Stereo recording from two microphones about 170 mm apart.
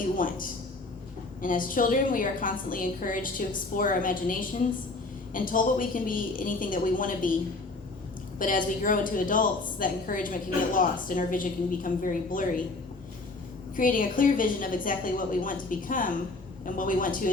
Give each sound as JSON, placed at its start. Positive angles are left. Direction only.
{"t": 0.2, "sound": "a woman's voice", "side_deg": 55}
{"t": 8.4, "sound": "a woman's voice", "side_deg": 55}
{"t": 13.7, "sound": "a woman's voice", "side_deg": 55}